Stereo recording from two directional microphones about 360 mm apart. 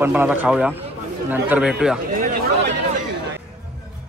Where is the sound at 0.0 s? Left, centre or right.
Centre.